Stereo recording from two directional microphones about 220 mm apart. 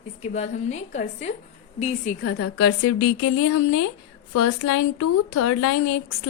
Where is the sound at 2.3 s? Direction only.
75° left (ahead or behind).